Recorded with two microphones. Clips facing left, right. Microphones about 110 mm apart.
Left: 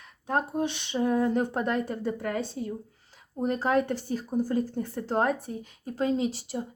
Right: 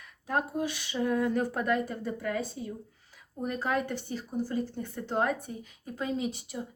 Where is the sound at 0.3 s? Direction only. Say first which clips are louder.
Left 3 dB; 30° left (ahead or behind).